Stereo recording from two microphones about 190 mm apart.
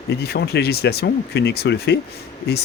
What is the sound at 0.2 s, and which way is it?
Speech, 60° left (ahead or behind).